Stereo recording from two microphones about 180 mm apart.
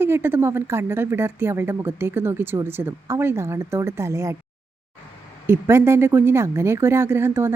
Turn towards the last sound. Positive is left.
turn(degrees=-15)  # may be behind; listen again after turning